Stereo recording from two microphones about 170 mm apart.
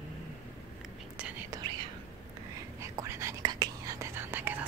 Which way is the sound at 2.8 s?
15° right (ahead or behind).